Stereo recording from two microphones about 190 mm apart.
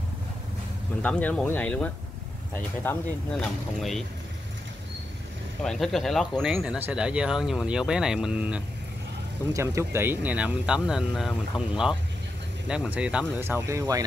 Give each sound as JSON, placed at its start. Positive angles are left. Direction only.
{"t": 1.0, "sound": "speech", "side_deg": 5}
{"t": 5.6, "sound": "speech", "side_deg": 0}